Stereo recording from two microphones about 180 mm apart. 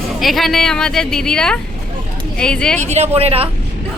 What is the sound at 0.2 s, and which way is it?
Speech, centre (ahead or behind).